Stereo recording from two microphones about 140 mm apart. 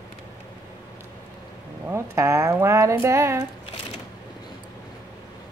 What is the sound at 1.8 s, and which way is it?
Speech, 20° right (ahead or behind).